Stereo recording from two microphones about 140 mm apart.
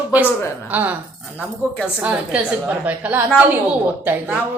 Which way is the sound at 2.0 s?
10° right (ahead or behind).